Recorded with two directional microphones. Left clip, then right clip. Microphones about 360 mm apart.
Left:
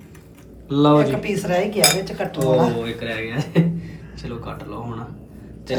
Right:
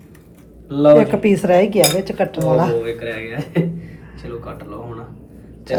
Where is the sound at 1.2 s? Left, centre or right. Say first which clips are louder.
Right 8 dB; right.